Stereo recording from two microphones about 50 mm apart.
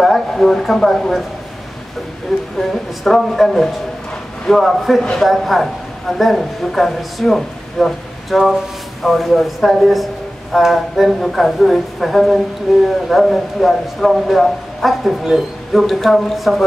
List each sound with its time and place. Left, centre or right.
0.0 s a man's voice: centre
2.3 s a man's voice: centre